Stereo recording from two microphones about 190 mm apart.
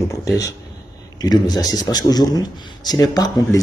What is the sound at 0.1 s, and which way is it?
Speech, 15° left (ahead or behind).